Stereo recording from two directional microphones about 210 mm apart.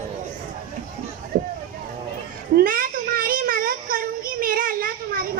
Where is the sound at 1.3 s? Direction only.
45° right (ahead or behind).